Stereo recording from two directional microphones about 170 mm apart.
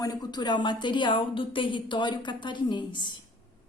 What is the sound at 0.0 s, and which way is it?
A woman's voice, 25° left (ahead or behind).